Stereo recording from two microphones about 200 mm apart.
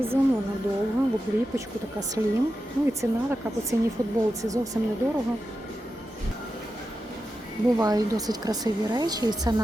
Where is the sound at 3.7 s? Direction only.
15° right (ahead or behind).